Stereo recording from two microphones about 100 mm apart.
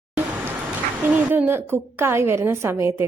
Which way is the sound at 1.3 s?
20° right (ahead or behind).